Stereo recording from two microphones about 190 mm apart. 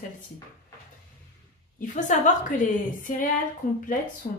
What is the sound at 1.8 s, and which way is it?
A woman's voice, 40° left (ahead or behind).